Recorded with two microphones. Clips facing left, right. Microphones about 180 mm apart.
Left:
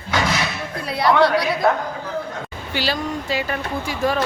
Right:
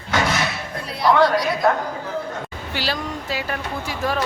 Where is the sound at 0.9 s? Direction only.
70° left (ahead or behind).